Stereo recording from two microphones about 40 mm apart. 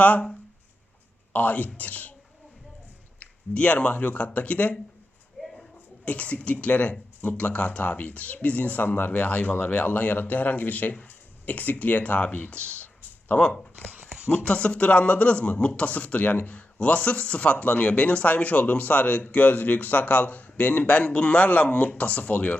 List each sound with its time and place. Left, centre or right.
0.0 s speech: left
3.2 s a sound: left
4.2 s speech: left
6.1 s speech: left
13.4 s speech: left
16.7 s speech: left